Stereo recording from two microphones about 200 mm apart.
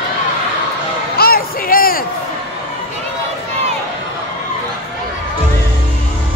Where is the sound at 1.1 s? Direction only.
50° left (ahead or behind).